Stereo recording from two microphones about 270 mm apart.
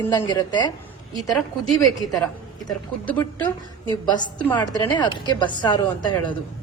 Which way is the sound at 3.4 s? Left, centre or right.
Centre.